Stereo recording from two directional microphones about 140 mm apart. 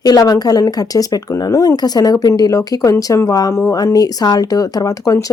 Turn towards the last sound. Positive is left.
turn(degrees=25)  # may be behind; listen again after turning